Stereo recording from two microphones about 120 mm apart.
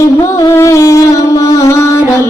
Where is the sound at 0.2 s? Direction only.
30° left (ahead or behind).